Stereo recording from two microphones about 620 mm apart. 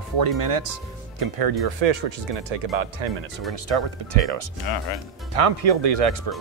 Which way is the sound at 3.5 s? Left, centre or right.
Right.